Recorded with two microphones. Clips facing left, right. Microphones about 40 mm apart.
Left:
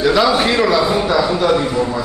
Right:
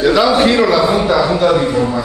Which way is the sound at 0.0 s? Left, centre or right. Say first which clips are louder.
Right 3 dB; centre.